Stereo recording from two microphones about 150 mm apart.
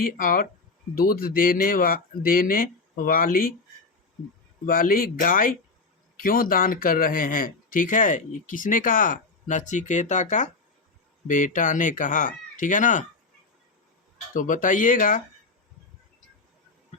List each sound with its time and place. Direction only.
0.0 s speech: 70° left (ahead or behind)
4.6 s speech: 70° left (ahead or behind)
14.3 s speech: 60° left (ahead or behind)